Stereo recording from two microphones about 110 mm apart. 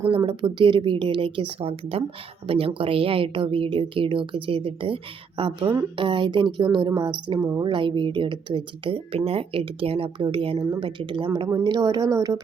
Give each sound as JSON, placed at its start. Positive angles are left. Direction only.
{"t": 0.0, "sound": "speech", "side_deg": -50}
{"t": 7.3, "sound": "a woman's voice", "side_deg": -25}
{"t": 7.6, "sound": "speech", "side_deg": -50}
{"t": 11.6, "sound": "speech", "side_deg": -40}